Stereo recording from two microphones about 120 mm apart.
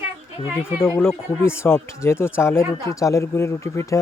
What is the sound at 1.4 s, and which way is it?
Speech, 20° left (ahead or behind).